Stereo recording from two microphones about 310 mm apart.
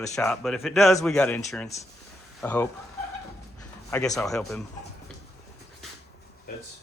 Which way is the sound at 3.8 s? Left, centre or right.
Centre.